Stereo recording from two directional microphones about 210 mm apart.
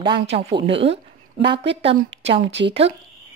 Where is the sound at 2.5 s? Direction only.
60° right (ahead or behind).